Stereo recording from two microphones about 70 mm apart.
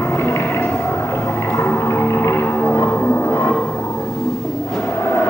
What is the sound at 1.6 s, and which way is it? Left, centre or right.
Music, left.